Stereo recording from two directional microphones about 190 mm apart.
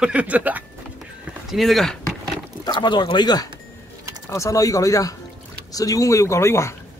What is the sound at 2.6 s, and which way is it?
Speech, 25° left (ahead or behind).